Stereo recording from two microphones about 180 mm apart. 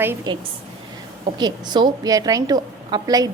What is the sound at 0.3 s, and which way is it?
A woman's voice, 20° right (ahead or behind).